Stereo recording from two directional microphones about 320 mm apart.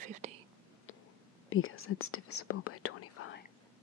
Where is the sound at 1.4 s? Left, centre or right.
Left.